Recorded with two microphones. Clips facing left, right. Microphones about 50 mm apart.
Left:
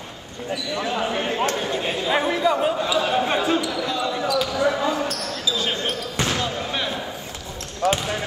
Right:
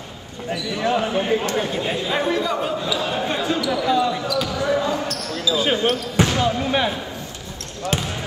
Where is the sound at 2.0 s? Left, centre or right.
Centre; by 3.5 s left.